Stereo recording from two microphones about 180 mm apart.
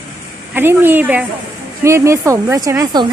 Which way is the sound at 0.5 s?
10° right (ahead or behind).